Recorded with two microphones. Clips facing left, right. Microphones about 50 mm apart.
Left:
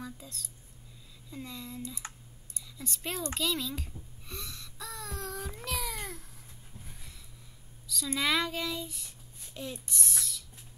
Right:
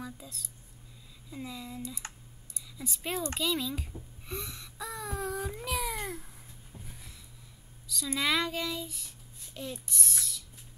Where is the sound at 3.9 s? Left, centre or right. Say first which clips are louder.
Right 4 dB; centre.